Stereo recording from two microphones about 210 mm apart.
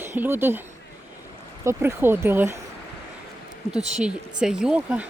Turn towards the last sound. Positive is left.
turn(degrees=-5)  # may be behind; listen again after turning